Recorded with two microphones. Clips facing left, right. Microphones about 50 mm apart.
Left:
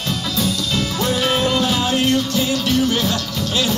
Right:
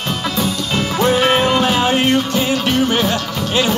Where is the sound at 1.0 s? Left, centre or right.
Right.